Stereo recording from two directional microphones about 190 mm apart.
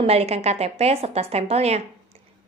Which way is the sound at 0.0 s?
30° right (ahead or behind).